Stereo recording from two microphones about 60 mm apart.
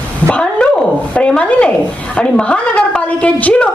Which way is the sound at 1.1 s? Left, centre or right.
Centre.